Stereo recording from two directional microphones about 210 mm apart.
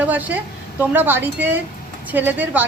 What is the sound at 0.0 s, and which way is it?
Speech, 10° right (ahead or behind).